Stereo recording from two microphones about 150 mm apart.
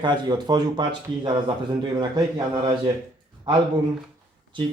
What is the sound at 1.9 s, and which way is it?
Speech, 30° right (ahead or behind).